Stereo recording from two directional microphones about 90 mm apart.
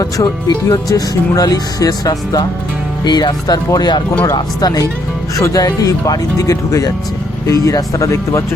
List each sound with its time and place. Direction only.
0.0 s speech: 40° left (ahead or behind)